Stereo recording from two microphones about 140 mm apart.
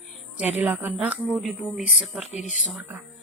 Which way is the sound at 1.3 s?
Centre (ahead or behind).